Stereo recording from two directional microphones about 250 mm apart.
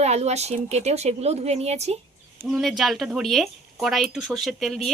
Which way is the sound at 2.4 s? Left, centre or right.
Centre.